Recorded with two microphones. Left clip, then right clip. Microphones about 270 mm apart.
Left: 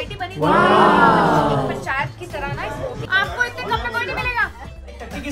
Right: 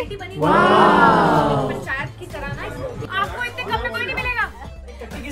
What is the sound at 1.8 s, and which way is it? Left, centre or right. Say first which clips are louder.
Music: left 3 dB; left.